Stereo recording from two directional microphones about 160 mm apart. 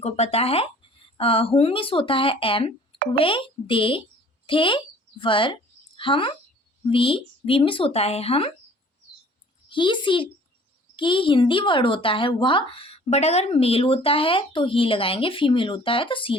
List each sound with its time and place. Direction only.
0.0 s speech: 40° left (ahead or behind)
9.6 s a woman's voice: 30° left (ahead or behind)